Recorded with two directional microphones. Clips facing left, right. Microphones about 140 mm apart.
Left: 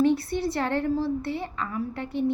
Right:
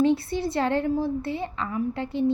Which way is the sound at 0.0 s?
25° right (ahead or behind).